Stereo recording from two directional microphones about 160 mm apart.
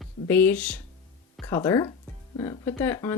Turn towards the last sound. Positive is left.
turn(degrees=15)  # may be behind; listen again after turning